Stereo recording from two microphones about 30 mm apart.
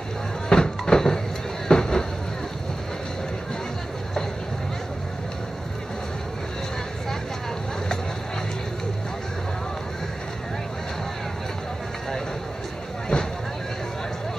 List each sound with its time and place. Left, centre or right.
0.5 s music: left
1.7 s a sound: left
13.1 s vehicle: left